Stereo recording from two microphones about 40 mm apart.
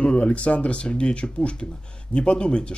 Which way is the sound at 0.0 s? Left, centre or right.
Left.